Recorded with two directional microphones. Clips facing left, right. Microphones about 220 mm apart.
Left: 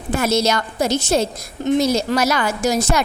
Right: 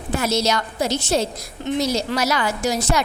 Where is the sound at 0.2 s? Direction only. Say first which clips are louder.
Left 3 dB; 50° left (ahead or behind).